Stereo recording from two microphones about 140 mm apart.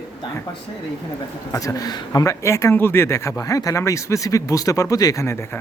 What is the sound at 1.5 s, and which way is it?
Speech, 25° left (ahead or behind).